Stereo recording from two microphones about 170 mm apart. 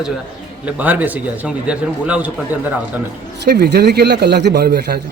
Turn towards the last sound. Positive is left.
turn(degrees=-65)  # may be behind; listen again after turning